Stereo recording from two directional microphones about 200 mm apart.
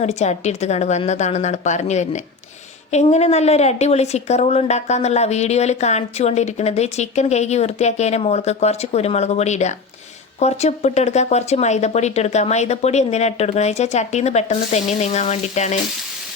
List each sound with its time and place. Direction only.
0.0 s speech: 35° left (ahead or behind)